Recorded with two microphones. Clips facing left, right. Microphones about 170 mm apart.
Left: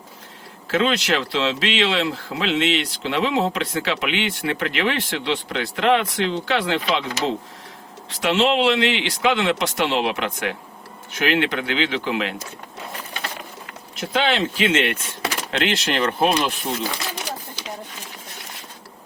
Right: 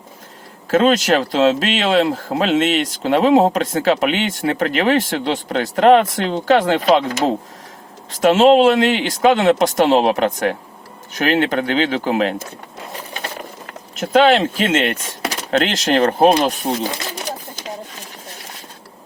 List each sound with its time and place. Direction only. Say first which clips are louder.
0.7 s speech: right 6 dB; 45° right (ahead or behind)
14.0 s speech: right 8 dB; 45° right (ahead or behind)